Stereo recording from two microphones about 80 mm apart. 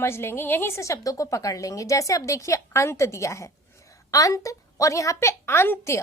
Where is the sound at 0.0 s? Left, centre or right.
Left.